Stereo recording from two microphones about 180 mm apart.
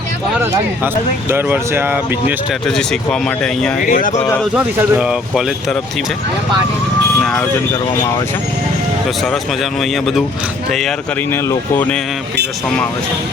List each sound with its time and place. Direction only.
1.3 s speech: 10° right (ahead or behind)
2.6 s speech: 5° left (ahead or behind)
3.8 s speech: 50° left (ahead or behind)
4.4 s speech: 5° right (ahead or behind)
7.2 s speech: centre (ahead or behind)
9.0 s speech: centre (ahead or behind)
11.3 s speech: 15° left (ahead or behind)